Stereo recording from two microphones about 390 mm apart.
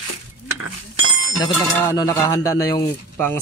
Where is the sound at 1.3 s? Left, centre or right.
Centre.